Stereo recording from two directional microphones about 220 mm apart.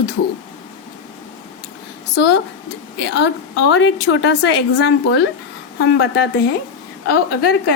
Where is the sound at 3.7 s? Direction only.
55° left (ahead or behind).